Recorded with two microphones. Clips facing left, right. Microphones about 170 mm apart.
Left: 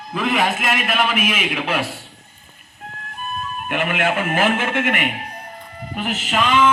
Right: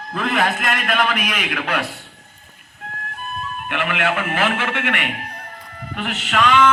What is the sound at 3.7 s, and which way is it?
Speech, 30° left (ahead or behind).